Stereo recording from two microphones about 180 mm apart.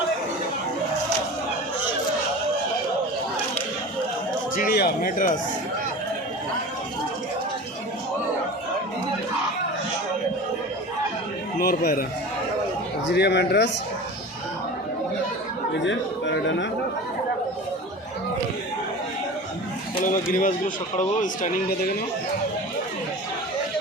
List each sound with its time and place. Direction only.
4.5 s speech: 55° left (ahead or behind)
11.6 s a man's voice: 55° left (ahead or behind)
13.1 s speech: 65° left (ahead or behind)
15.7 s speech: 90° left
20.1 s speech: 50° left (ahead or behind)